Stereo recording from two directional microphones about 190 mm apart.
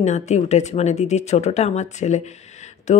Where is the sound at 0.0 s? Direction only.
35° left (ahead or behind).